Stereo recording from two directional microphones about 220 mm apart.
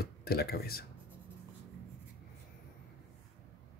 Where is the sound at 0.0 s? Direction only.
45° left (ahead or behind).